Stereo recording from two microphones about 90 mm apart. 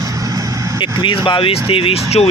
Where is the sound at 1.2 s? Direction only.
75° left (ahead or behind).